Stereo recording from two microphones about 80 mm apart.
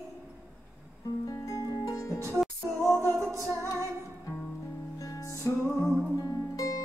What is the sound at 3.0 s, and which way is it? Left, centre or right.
Music, right.